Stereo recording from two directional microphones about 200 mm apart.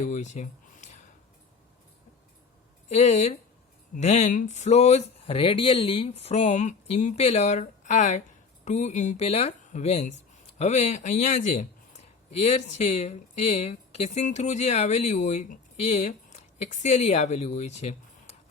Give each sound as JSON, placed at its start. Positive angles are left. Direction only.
{"t": 0.0, "sound": "speech", "side_deg": 35}
{"t": 2.9, "sound": "speech", "side_deg": 35}